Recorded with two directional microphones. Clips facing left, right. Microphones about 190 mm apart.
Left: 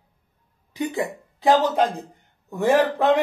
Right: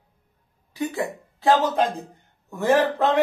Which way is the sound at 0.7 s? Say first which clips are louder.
Left 1 dB; 20° left (ahead or behind).